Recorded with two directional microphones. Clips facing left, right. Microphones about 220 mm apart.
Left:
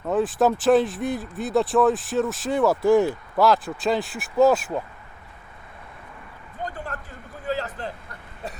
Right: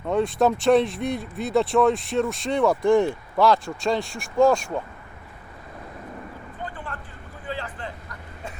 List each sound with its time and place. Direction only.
0.0 s speech: 5° left (ahead or behind)
6.7 s vehicle: 40° left (ahead or behind)